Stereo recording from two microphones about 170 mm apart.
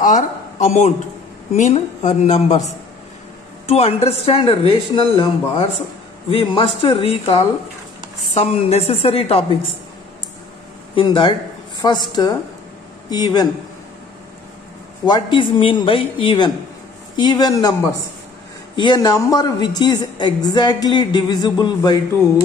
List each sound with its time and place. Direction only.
0.0 s a man's voice: 45° left (ahead or behind)
11.0 s a woman's voice: 30° left (ahead or behind)
15.0 s a woman's voice: 25° left (ahead or behind)
18.8 s a woman's voice: 25° left (ahead or behind)